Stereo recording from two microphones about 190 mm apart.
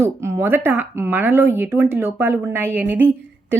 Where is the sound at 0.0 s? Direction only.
15° right (ahead or behind).